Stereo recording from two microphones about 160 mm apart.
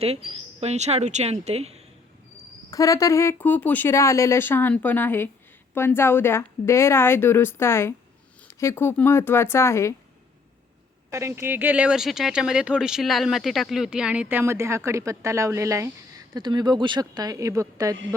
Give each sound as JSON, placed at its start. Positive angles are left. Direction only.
{"t": 0.0, "sound": "speech", "side_deg": -40}
{"t": 2.6, "sound": "speech", "side_deg": 20}
{"t": 11.1, "sound": "speech", "side_deg": -15}